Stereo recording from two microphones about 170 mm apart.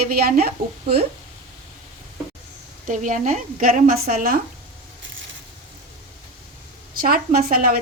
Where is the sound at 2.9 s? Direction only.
50° right (ahead or behind).